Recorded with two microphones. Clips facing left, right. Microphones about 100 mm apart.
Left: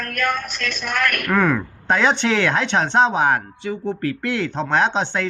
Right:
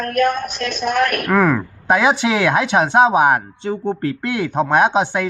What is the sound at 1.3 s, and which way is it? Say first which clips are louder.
Speech: right 3 dB; 5° right (ahead or behind).